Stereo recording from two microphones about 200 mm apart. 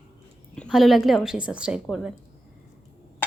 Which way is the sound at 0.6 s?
Centre (ahead or behind).